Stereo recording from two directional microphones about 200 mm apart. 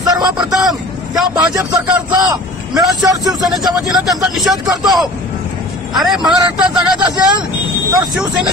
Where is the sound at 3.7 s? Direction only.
Centre (ahead or behind).